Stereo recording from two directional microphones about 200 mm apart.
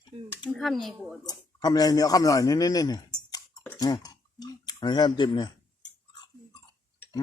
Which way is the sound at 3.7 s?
20° left (ahead or behind).